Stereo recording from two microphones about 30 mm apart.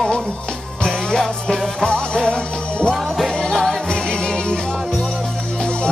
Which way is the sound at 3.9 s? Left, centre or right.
Left.